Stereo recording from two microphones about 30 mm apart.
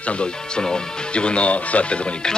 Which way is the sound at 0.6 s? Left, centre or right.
Left.